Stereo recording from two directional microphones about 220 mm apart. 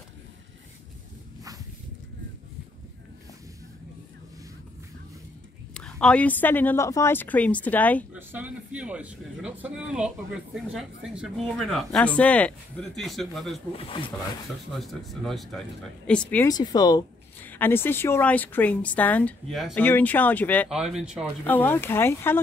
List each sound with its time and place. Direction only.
5.8 s a woman's voice: 5° left (ahead or behind)
8.1 s a man's voice: 10° right (ahead or behind)
13.7 s speech: 25° left (ahead or behind)
14.7 s a man's voice: centre (ahead or behind)
20.7 s a man's voice: 5° right (ahead or behind)
21.5 s a woman's voice: 10° left (ahead or behind)